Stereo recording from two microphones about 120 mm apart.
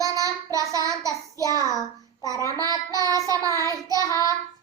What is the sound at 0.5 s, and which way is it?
Child singing, 30° right (ahead or behind).